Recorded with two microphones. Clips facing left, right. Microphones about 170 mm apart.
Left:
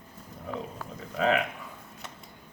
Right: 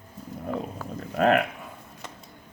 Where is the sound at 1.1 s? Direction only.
55° right (ahead or behind).